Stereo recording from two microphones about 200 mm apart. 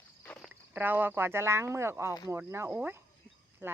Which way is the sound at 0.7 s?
10° right (ahead or behind).